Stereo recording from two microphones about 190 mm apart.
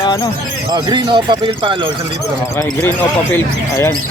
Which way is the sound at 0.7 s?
25° right (ahead or behind).